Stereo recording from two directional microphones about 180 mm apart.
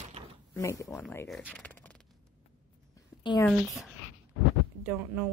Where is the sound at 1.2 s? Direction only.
Centre (ahead or behind).